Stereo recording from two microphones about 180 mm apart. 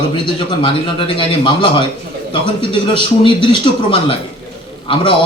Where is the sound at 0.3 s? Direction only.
30° left (ahead or behind).